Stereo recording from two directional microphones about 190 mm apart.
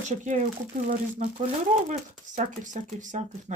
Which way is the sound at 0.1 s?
40° right (ahead or behind).